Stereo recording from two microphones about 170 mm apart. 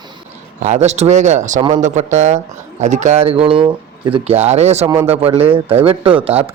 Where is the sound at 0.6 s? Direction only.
40° right (ahead or behind).